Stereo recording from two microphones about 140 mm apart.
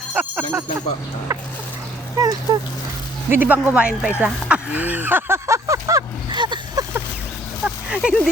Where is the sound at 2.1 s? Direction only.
25° right (ahead or behind).